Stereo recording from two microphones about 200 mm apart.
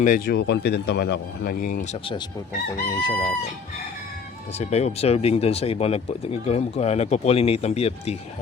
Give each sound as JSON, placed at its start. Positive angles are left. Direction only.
{"t": 0.0, "sound": "speech", "side_deg": 40}
{"t": 0.3, "sound": "speech", "side_deg": 60}
{"t": 2.9, "sound": "speech", "side_deg": 25}
{"t": 4.5, "sound": "speech", "side_deg": 35}